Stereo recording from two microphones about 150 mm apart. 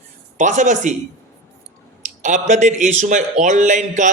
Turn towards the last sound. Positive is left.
turn(degrees=-55)  # may be behind; listen again after turning